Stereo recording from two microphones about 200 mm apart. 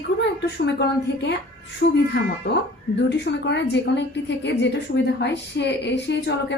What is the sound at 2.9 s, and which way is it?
A woman's voice, 60° left (ahead or behind).